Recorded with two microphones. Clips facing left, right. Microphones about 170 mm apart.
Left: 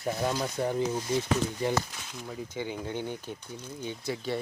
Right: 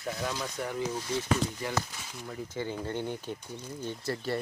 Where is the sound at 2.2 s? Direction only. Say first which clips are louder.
Even; 10° left (ahead or behind).